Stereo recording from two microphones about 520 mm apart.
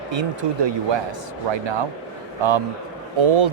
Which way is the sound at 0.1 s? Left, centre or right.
Right.